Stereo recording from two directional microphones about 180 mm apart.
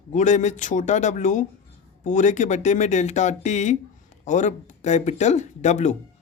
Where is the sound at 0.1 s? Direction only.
45° left (ahead or behind).